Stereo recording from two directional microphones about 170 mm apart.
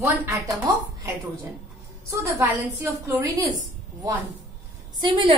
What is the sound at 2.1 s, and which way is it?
A woman's voice, 15° right (ahead or behind).